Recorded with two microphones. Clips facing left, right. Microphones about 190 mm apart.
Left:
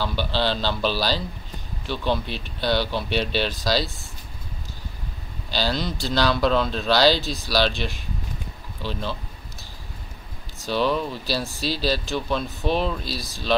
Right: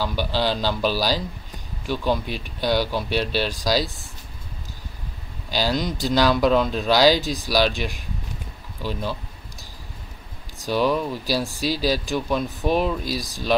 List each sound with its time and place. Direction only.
0.0 s speech: 10° right (ahead or behind)
5.5 s speech: 15° right (ahead or behind)
10.6 s speech: 10° right (ahead or behind)